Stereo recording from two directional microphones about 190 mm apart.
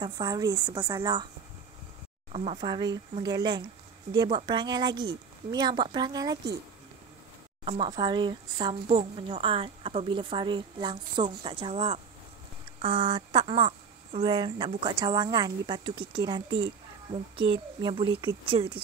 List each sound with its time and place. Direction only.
0.0 s speech: 20° right (ahead or behind)
2.3 s speech: 35° right (ahead or behind)
7.6 s speech: 30° right (ahead or behind)